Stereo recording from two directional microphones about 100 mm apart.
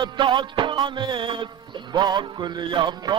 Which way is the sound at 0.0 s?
50° right (ahead or behind).